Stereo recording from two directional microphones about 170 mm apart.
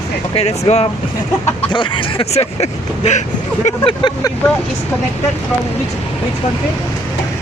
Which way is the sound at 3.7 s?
30° left (ahead or behind).